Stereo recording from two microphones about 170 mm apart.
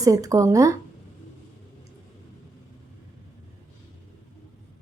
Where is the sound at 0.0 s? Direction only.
20° right (ahead or behind).